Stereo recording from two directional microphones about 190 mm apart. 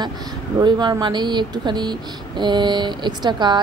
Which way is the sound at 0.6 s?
25° right (ahead or behind).